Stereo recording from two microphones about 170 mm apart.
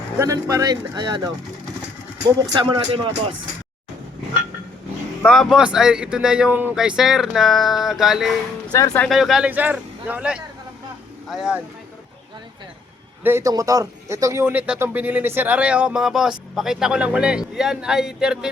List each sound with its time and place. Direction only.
0.2 s speech: 20° right (ahead or behind)
2.5 s speech: 30° right (ahead or behind)
5.2 s speech: centre (ahead or behind)
8.7 s speech: 20° left (ahead or behind)
9.0 s speech: centre (ahead or behind)
13.2 s speech: 15° right (ahead or behind)